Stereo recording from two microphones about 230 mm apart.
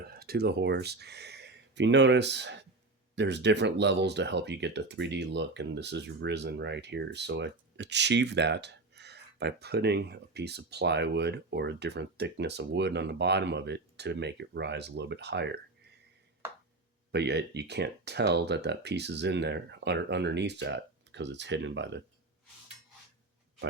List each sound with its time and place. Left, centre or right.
0.0 s speech: right
17.1 s speech: right